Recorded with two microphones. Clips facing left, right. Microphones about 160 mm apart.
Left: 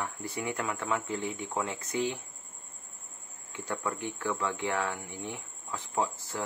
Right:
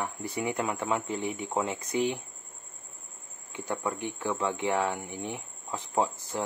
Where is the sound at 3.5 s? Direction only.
15° right (ahead or behind).